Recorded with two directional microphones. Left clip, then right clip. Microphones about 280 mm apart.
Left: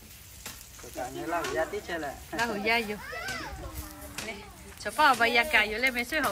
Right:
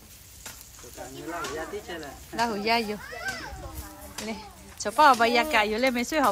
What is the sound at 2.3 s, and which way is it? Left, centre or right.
Speech, centre.